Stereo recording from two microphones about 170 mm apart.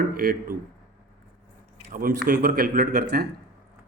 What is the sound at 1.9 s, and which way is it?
Speech, 55° right (ahead or behind).